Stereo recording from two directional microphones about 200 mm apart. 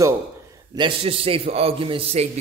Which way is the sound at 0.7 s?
25° right (ahead or behind).